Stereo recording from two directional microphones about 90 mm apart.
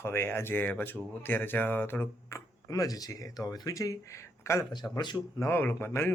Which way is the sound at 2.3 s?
40° left (ahead or behind).